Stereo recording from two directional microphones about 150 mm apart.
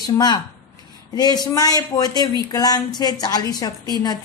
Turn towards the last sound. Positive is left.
turn(degrees=25)  # may be behind; listen again after turning